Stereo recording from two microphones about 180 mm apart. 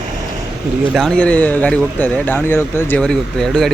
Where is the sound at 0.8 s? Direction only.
Centre (ahead or behind).